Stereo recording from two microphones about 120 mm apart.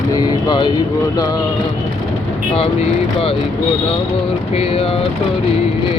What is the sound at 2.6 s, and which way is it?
Speech, 55° left (ahead or behind).